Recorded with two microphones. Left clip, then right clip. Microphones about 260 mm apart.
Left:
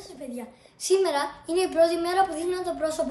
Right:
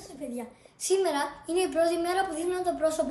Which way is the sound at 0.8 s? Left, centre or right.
Centre.